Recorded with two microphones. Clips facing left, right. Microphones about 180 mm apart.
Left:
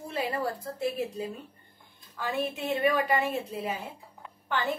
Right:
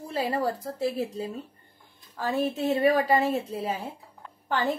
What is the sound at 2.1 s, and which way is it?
A woman's voice, 35° right (ahead or behind).